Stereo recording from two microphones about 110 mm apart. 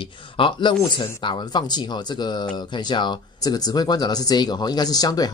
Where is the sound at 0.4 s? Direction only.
50° left (ahead or behind).